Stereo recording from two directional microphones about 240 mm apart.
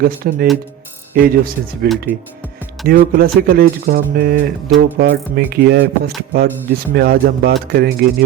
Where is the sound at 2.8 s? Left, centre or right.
Right.